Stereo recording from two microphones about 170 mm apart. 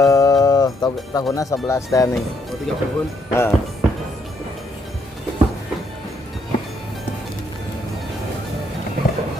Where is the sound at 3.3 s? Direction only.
15° left (ahead or behind).